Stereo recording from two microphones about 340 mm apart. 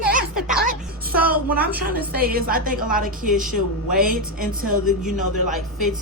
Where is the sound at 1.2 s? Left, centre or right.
Centre.